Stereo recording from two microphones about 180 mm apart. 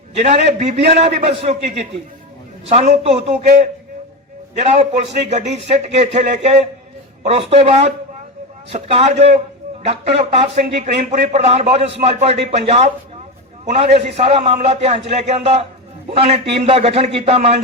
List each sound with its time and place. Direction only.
0.2 s a man's voice: 40° right (ahead or behind)
13.9 s a man's voice: 35° right (ahead or behind)